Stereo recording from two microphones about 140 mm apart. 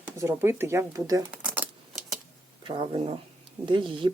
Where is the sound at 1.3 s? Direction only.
10° right (ahead or behind).